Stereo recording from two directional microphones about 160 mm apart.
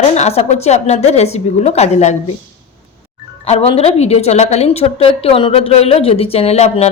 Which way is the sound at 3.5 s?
40° left (ahead or behind).